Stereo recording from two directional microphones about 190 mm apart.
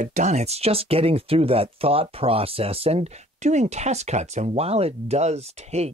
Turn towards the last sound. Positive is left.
turn(degrees=-35)  # may be behind; listen again after turning